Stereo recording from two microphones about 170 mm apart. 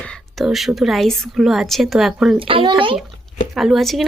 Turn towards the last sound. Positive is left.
turn(degrees=0)  # may be behind; listen again after turning